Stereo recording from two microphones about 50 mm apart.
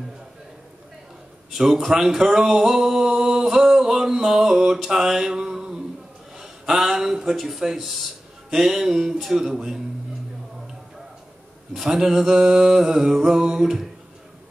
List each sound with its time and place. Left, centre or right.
1.5 s speech: centre
4.8 s a sound: centre
9.2 s speech: centre
11.7 s mantra: centre